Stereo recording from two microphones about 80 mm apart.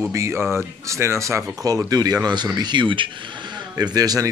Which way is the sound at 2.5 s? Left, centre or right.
Right.